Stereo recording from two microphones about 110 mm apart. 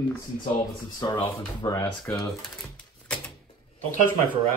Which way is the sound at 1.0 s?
40° left (ahead or behind).